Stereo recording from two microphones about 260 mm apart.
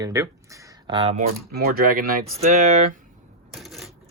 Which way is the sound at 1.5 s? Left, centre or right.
Right.